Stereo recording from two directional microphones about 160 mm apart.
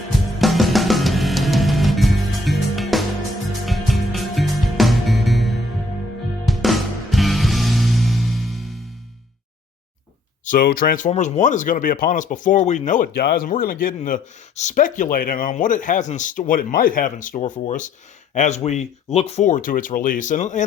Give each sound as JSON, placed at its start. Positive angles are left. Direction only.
{"t": 0.3, "sound": "music", "side_deg": 0}
{"t": 10.4, "sound": "speech", "side_deg": 60}